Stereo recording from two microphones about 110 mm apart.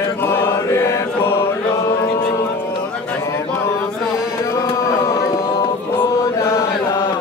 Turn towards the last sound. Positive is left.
turn(degrees=25)  # may be behind; listen again after turning